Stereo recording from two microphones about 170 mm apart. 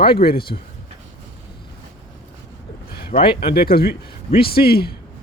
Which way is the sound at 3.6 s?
65° left (ahead or behind).